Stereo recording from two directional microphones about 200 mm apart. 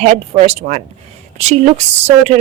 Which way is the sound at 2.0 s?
30° right (ahead or behind).